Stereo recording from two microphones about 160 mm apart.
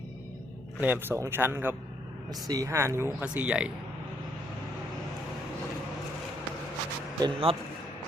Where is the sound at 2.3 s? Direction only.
25° right (ahead or behind); by 3.7 s 10° right (ahead or behind).